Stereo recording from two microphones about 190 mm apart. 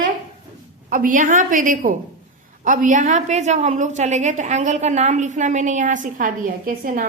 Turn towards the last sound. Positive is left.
turn(degrees=-45)  # may be behind; listen again after turning